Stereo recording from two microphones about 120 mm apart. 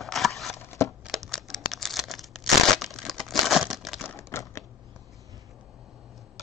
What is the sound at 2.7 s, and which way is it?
Crumpling, centre (ahead or behind).